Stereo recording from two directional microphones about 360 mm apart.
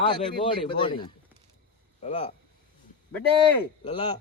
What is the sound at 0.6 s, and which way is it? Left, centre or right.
Speech, centre.